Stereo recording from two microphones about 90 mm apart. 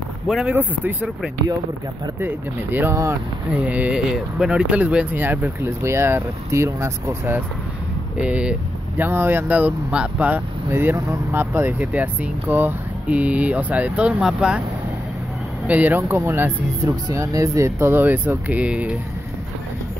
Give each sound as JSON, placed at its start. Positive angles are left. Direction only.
{"t": 0.5, "sound": "speech", "side_deg": -15}
{"t": 2.1, "sound": "speech", "side_deg": -25}
{"t": 8.2, "sound": "speech", "side_deg": -10}
{"t": 15.6, "sound": "speech", "side_deg": -20}
{"t": 16.0, "sound": "speech", "side_deg": -30}
{"t": 16.9, "sound": "speech", "side_deg": -40}